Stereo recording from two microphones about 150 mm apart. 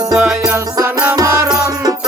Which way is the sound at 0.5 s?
25° right (ahead or behind).